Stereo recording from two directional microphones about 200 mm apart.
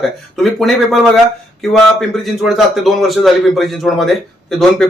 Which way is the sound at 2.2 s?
Centre (ahead or behind).